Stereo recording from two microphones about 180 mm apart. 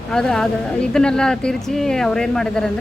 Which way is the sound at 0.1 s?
5° left (ahead or behind).